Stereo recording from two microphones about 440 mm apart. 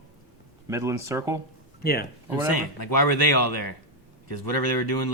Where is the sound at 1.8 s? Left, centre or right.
Left.